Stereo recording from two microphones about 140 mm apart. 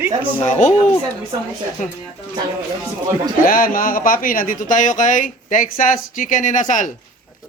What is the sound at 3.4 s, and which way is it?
Speech, 90° left.